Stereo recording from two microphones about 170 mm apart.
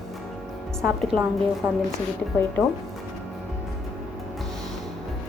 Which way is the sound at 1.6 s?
10° right (ahead or behind).